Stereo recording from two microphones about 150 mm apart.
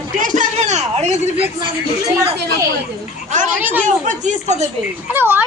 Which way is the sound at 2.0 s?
20° right (ahead or behind).